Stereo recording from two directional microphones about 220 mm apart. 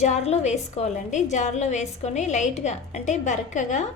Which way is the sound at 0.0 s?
30° left (ahead or behind).